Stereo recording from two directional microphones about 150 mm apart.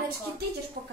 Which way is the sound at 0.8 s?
60° right (ahead or behind).